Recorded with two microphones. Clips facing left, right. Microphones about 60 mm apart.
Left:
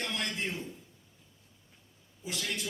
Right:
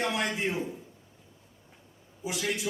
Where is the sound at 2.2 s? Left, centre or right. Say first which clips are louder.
Right 5 dB; centre.